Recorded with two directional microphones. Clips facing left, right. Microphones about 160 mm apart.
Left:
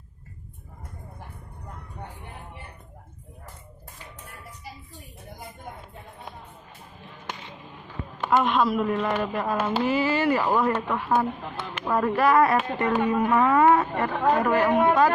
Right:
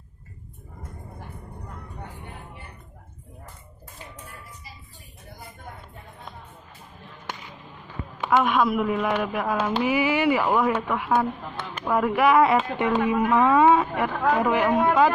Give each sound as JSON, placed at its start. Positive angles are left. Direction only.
{"t": 8.2, "sound": "speech", "side_deg": -5}
{"t": 9.8, "sound": "speech", "side_deg": -10}
{"t": 11.2, "sound": "speech", "side_deg": 5}
{"t": 11.9, "sound": "speech", "side_deg": -10}
{"t": 14.7, "sound": "a man's voice", "side_deg": 15}